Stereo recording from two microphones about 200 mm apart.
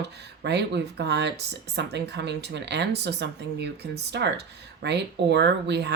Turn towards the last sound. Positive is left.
turn(degrees=-55)  # may be behind; listen again after turning